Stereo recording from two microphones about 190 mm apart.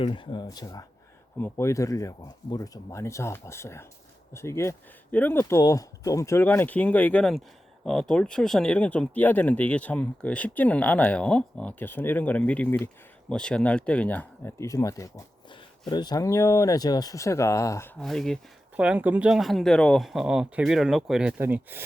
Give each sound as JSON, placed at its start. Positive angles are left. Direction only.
{"t": 0.0, "sound": "speech", "side_deg": 25}
{"t": 18.0, "sound": "speech", "side_deg": 0}